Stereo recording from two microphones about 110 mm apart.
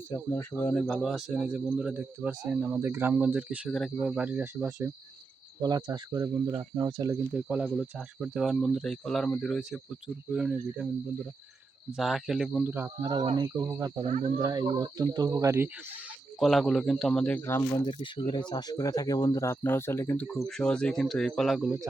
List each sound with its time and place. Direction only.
0.1 s speech: 20° left (ahead or behind)
0.8 s speech: 5° left (ahead or behind); by 3.7 s 15° right (ahead or behind)
3.7 s speech: 5° left (ahead or behind)
4.0 s speech: 10° right (ahead or behind)
5.5 s speech: 40° right (ahead or behind)
7.3 s speech: 10° right (ahead or behind)
11.9 s speech: centre (ahead or behind)
12.6 s cricket: 20° right (ahead or behind)
13.0 s speech: 35° right (ahead or behind)
14.0 s speech: 75° right (ahead or behind)
14.3 s speech: 40° right (ahead or behind); by 16.1 s 15° right (ahead or behind)
16.4 s speech: centre (ahead or behind); by 17.7 s 20° left (ahead or behind)
17.8 s speech: 50° left (ahead or behind); by 20.2 s 25° left (ahead or behind)
20.5 s speech: 5° left (ahead or behind)